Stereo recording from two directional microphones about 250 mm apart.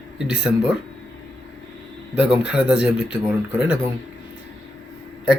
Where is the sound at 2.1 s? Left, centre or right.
Centre.